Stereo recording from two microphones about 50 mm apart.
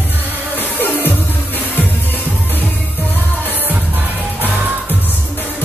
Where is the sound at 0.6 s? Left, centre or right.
Left.